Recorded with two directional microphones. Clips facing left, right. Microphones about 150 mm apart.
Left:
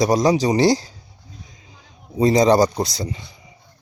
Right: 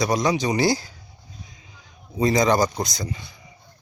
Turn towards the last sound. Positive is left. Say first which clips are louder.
# left 4 dB
turn(degrees=30)  # may be behind; listen again after turning